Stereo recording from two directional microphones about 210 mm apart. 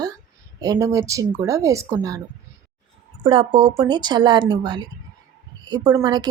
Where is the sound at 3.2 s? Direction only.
20° right (ahead or behind).